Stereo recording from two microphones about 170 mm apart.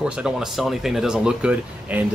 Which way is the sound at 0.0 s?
5° right (ahead or behind).